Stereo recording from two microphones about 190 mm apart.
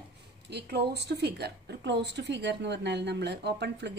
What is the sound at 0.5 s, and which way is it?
A woman's voice, 60° right (ahead or behind).